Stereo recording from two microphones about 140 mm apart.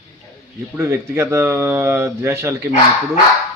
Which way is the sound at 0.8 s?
20° right (ahead or behind).